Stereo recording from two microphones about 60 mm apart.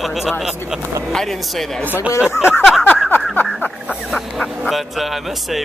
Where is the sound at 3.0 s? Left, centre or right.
Left.